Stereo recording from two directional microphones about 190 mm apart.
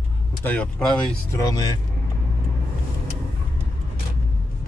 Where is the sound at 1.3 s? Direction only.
20° left (ahead or behind).